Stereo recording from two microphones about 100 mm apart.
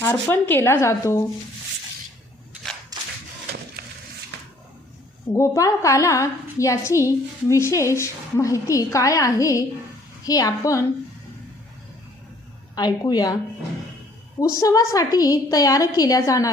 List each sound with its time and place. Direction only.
0.0 s a woman's voice: 20° left (ahead or behind)
2.9 s a sound: 40° right (ahead or behind)
5.3 s a woman's voice: 30° left (ahead or behind)
12.7 s a woman's voice: 40° left (ahead or behind)
14.3 s a woman's voice: 35° left (ahead or behind)